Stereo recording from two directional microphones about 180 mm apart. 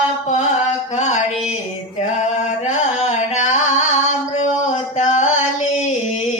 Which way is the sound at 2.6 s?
40° left (ahead or behind).